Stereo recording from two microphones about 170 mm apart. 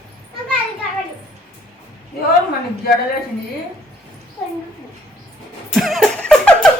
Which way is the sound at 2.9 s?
60° left (ahead or behind).